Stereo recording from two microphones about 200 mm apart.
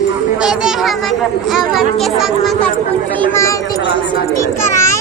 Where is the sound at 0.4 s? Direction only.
Centre (ahead or behind).